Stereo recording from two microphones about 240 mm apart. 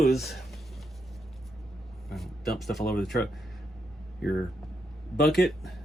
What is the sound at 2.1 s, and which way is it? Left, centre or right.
Speech, centre.